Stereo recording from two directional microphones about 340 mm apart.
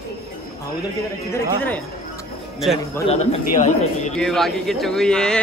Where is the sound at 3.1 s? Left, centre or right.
Centre.